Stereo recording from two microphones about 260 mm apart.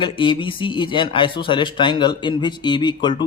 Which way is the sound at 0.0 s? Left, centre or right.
Centre.